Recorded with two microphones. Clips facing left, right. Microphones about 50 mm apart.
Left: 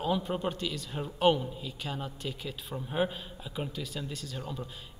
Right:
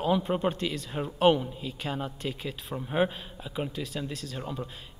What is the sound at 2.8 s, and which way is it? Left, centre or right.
A man's voice, centre.